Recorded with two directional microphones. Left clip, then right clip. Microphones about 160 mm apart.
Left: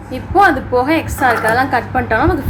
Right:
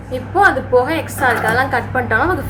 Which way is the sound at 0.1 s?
20° left (ahead or behind).